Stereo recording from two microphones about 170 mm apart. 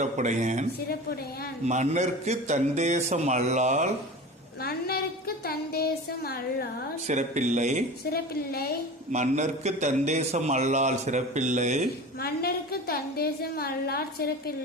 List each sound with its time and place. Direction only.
0.0 s a man's voice: 45° right (ahead or behind)
1.6 s a man's voice: 40° right (ahead or behind)
4.6 s a woman's voice: 65° left (ahead or behind)
7.1 s a man's voice: 45° right (ahead or behind)
8.1 s a woman's voice: 65° left (ahead or behind)
9.1 s a man's voice: 45° right (ahead or behind)
12.2 s a woman's voice: 65° left (ahead or behind)